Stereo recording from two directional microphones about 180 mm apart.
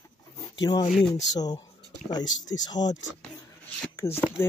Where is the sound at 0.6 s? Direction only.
25° left (ahead or behind).